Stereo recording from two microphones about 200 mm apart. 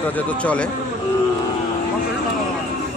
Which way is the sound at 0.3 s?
5° left (ahead or behind).